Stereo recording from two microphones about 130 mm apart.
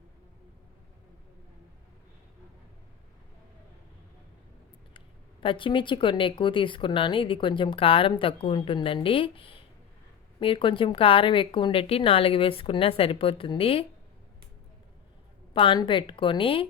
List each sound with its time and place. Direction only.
4.9 s a woman's voice: 40° left (ahead or behind)
15.5 s speech: 40° left (ahead or behind)